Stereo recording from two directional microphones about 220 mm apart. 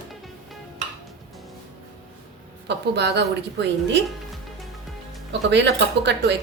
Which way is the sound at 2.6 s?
50° right (ahead or behind).